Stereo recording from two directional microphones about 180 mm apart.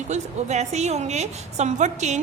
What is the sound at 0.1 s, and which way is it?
A woman's voice, 40° right (ahead or behind).